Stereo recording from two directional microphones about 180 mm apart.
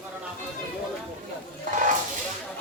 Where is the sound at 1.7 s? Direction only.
45° right (ahead or behind).